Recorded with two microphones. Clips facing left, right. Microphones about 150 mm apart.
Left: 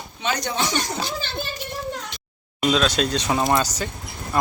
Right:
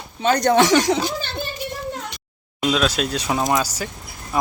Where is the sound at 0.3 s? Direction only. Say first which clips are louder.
Right 12 dB; 70° right (ahead or behind); by 0.9 s 90° right.